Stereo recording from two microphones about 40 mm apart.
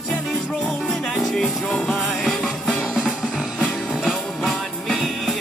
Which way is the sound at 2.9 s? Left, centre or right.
Centre.